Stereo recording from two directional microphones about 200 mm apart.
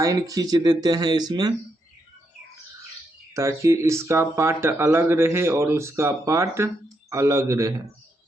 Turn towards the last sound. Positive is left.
turn(degrees=-15)  # may be behind; listen again after turning